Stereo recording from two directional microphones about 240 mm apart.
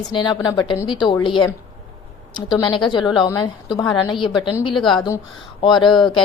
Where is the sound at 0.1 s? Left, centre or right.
Centre.